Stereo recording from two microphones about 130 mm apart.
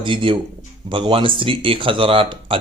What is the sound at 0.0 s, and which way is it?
A man's voice, 40° right (ahead or behind).